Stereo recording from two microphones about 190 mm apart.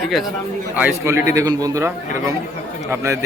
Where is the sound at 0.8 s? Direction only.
10° right (ahead or behind).